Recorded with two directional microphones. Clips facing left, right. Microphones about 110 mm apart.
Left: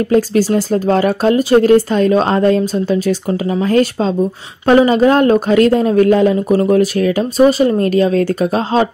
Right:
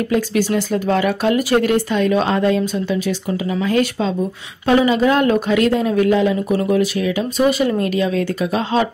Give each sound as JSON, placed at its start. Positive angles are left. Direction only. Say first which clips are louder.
{"t": 0.1, "sound": "speech", "louder": "left 6 dB", "side_deg": 35}